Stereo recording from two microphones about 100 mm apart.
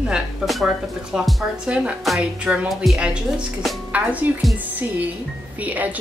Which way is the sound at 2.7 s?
Centre (ahead or behind).